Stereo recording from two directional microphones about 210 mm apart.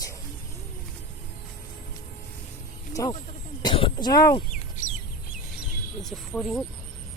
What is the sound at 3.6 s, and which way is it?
Throat clearing, 20° left (ahead or behind).